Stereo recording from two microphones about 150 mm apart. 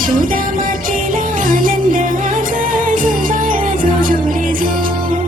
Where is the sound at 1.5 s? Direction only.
65° right (ahead or behind).